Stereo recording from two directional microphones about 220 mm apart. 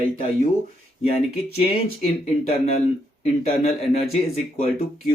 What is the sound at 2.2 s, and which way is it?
Speech, 30° left (ahead or behind).